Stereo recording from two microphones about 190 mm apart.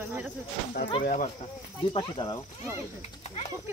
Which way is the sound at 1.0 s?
40° left (ahead or behind).